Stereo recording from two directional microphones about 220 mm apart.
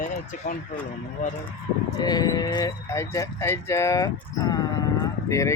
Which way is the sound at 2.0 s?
15° left (ahead or behind).